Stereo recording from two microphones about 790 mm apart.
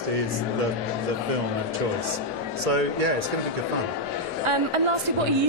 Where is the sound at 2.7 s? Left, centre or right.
Right.